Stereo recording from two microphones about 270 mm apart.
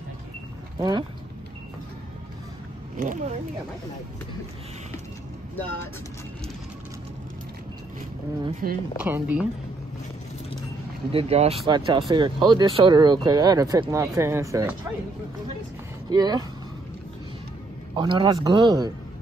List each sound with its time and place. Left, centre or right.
0.7 s speech: centre
3.0 s speech: right
8.6 s speech: right
8.9 s speech: centre
11.1 s speech: right
16.1 s speech: centre
17.9 s speech: centre